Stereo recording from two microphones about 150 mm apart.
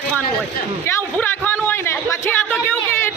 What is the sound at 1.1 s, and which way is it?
A man's voice, 10° left (ahead or behind).